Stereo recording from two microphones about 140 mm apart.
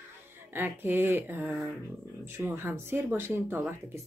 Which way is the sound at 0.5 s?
15° right (ahead or behind).